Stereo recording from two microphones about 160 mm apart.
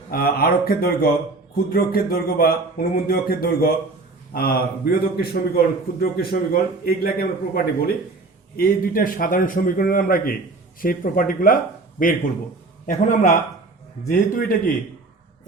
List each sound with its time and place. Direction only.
0.1 s a man's voice: 70° left (ahead or behind)